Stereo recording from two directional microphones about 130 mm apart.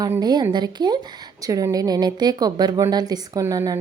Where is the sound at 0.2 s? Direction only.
30° right (ahead or behind).